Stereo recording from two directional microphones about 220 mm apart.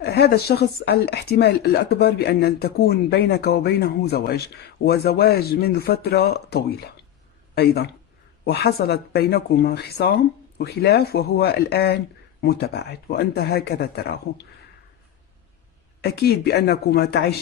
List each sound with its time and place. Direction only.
0.0 s speech: 45° left (ahead or behind)
16.0 s speech: 45° left (ahead or behind)